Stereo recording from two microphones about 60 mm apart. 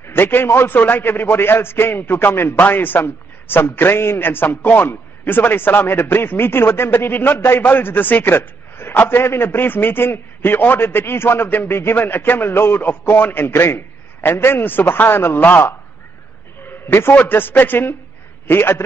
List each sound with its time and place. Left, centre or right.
0.0 s a man's voice: left
0.7 s a man's voice: left
7.3 s a man's voice: left
7.6 s a man's voice: left
16.6 s a sound: left
17.1 s a man's voice: left